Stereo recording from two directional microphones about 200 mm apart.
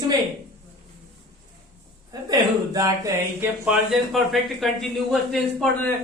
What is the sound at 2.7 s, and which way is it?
Music, 15° right (ahead or behind).